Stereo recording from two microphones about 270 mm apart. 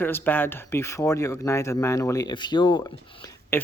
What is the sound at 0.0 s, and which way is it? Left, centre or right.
Speech, centre.